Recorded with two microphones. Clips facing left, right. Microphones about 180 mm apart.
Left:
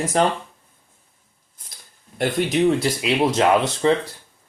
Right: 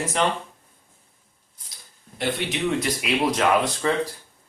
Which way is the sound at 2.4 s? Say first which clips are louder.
Left 7 dB; 45° left (ahead or behind).